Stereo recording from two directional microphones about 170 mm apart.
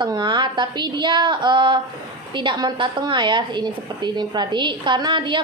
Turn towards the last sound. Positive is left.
turn(degrees=-30)  # may be behind; listen again after turning